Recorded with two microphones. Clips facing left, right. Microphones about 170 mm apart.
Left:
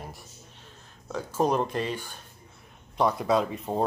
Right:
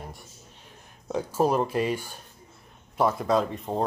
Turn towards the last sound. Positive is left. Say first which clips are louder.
# even
turn(degrees=0)  # may be behind; listen again after turning